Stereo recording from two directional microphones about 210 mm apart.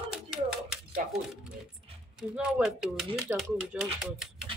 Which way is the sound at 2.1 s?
5° right (ahead or behind).